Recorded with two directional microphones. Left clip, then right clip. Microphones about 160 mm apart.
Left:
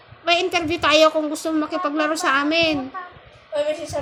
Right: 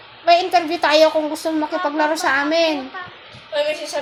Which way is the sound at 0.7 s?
60° left (ahead or behind).